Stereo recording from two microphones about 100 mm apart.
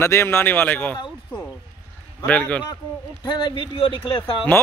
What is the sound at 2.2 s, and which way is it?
Speech, 15° left (ahead or behind).